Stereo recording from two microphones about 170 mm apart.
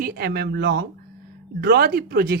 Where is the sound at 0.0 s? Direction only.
65° right (ahead or behind).